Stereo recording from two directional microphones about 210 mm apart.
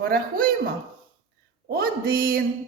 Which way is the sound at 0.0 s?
45° right (ahead or behind).